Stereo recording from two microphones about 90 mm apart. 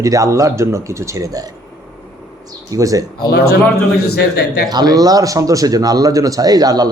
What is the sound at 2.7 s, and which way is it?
Speech, 40° right (ahead or behind).